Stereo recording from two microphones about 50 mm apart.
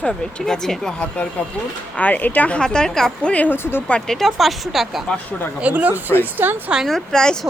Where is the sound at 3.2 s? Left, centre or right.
Left.